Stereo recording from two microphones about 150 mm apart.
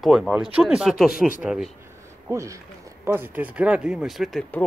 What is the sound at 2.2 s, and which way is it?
Speech, 20° right (ahead or behind).